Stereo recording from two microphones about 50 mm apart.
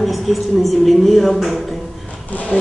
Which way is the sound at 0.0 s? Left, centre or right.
Centre.